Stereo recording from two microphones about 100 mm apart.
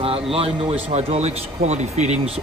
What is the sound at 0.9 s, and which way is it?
Speech, 90° right.